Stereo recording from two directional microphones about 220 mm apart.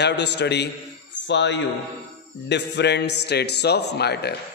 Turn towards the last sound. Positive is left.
turn(degrees=50)  # may be behind; listen again after turning